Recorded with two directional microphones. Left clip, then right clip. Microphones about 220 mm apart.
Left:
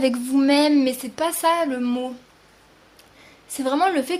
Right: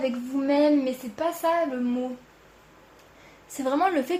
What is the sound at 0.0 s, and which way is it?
A woman's voice, 35° left (ahead or behind).